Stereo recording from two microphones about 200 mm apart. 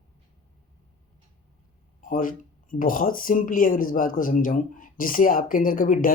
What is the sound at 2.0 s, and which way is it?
Speech, 45° left (ahead or behind).